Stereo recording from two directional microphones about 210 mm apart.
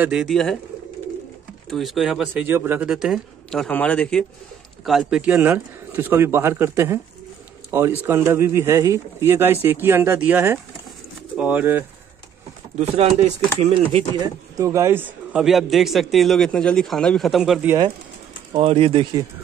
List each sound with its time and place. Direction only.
0.0 s a man's voice: 5° right (ahead or behind)
1.7 s a man's voice: centre (ahead or behind)
12.7 s speech: 30° right (ahead or behind)
14.6 s a man's voice: 15° right (ahead or behind)
18.5 s speech: 30° right (ahead or behind)